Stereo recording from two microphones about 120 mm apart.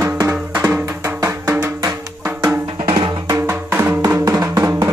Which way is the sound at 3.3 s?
20° right (ahead or behind).